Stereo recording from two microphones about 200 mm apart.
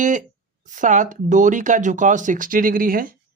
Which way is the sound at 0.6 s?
40° right (ahead or behind).